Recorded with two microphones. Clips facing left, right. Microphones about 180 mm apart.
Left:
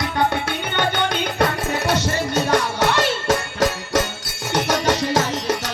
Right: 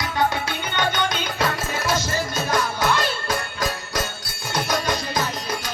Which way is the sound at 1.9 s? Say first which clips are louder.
Left 3 dB; 70° left (ahead or behind).